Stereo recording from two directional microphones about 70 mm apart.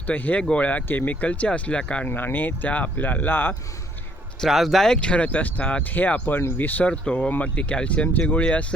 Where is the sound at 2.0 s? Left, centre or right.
Left.